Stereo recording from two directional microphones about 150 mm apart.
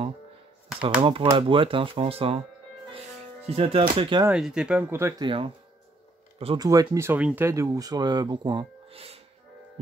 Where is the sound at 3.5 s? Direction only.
40° right (ahead or behind).